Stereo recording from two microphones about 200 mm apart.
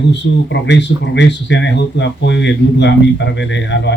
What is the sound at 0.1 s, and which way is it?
Speech, 60° left (ahead or behind).